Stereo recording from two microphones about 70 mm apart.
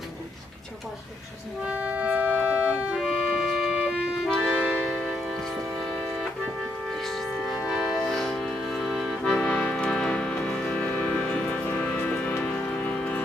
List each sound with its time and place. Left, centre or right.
1.6 s organ: right
4.4 s music: centre
4.9 s church bell: centre
5.3 s music: centre
7.7 s music: centre
8.1 s accordion: centre
11.8 s music: left